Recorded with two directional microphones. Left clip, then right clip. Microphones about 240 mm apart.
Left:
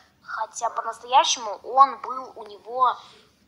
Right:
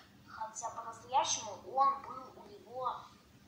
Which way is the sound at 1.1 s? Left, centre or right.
Left.